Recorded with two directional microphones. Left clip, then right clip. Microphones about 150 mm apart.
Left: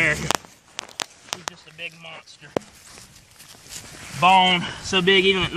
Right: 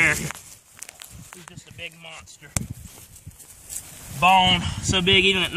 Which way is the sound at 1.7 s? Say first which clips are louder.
Left 2 dB; 5° right (ahead or behind).